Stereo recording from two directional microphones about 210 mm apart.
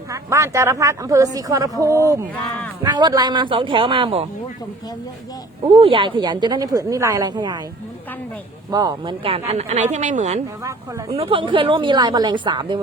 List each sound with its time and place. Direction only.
0.1 s a woman's voice: 15° right (ahead or behind)
2.8 s a woman's voice: 20° right (ahead or behind)
5.6 s a woman's voice: 25° right (ahead or behind)
8.7 s speech: 20° right (ahead or behind)
10.6 s a woman's voice: 15° right (ahead or behind)
11.2 s a woman's voice: 25° right (ahead or behind)